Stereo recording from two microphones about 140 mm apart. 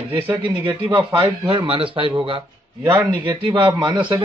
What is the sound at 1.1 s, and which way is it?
Speech, 35° right (ahead or behind).